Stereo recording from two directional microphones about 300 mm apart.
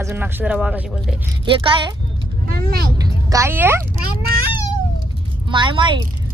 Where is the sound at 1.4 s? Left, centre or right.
Centre.